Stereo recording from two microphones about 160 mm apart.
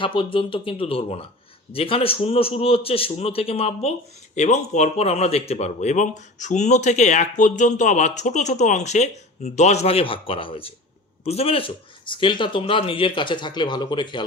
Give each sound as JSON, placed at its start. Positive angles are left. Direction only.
{"t": 0.0, "sound": "speech", "side_deg": 30}